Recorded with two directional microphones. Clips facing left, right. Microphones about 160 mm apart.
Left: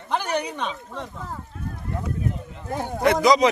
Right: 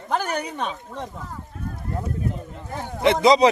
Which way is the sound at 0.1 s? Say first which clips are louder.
Even; 45° right (ahead or behind).